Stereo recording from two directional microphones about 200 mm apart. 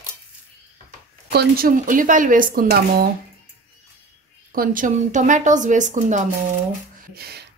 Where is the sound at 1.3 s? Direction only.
50° right (ahead or behind).